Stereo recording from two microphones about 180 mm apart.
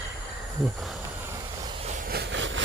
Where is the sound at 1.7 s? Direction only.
35° right (ahead or behind).